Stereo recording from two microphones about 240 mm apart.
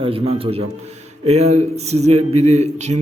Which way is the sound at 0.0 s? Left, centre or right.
Right.